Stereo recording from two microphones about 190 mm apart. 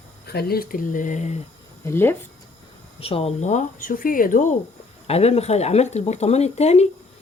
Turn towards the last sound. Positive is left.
turn(degrees=35)  # may be behind; listen again after turning